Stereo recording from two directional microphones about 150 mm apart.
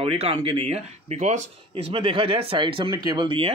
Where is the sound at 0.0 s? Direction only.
40° right (ahead or behind).